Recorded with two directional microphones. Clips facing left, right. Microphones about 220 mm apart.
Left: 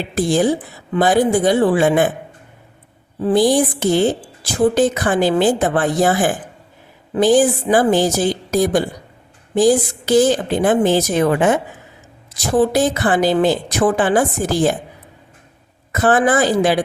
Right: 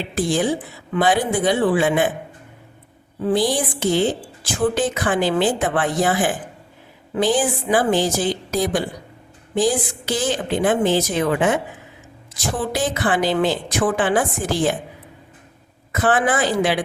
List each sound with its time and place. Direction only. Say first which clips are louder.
0.1 s a woman's voice: left 4 dB; 40° left (ahead or behind)
3.2 s a woman's voice: left 5 dB; 45° left (ahead or behind)
12.7 s a woman's voice: left 5 dB; 40° left (ahead or behind)
15.9 s a woman's voice: left 4 dB; 40° left (ahead or behind)